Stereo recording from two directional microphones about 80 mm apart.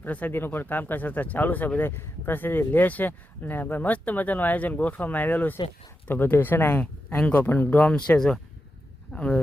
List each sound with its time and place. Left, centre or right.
0.0 s speech: left
7.2 s speech: centre